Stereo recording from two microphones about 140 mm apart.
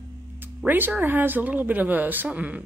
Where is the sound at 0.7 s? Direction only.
15° right (ahead or behind).